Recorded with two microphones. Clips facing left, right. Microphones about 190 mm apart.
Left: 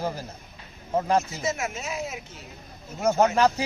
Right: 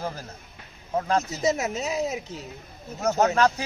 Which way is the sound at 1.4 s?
40° right (ahead or behind).